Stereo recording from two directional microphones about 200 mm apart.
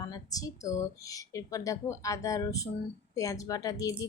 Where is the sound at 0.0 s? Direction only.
20° left (ahead or behind).